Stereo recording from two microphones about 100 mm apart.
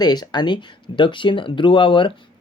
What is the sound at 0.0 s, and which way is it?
Speech, 45° left (ahead or behind).